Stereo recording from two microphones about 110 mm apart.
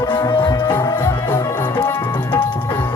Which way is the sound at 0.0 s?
35° left (ahead or behind).